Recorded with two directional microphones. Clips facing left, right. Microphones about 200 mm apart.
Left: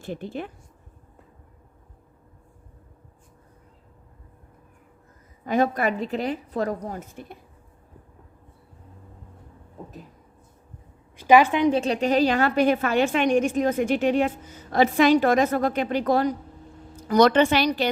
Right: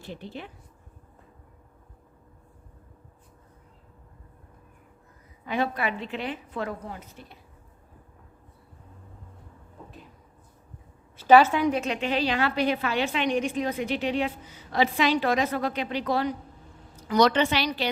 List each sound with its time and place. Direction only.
0.0 s a woman's voice: 50° left (ahead or behind)
5.5 s a woman's voice: 45° left (ahead or behind)
11.2 s a woman's voice: 15° left (ahead or behind)
11.8 s a woman's voice: 40° left (ahead or behind)